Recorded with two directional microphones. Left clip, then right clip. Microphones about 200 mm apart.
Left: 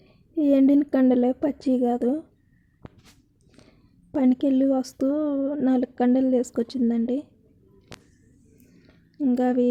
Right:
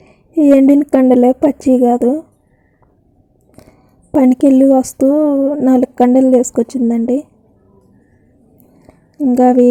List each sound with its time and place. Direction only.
0.0 s a sound: 20° right (ahead or behind)
0.9 s a woman's voice: 20° right (ahead or behind)
3.5 s speech: 25° right (ahead or behind)
5.6 s a woman's voice: 25° right (ahead or behind)
9.3 s a woman's voice: 25° right (ahead or behind)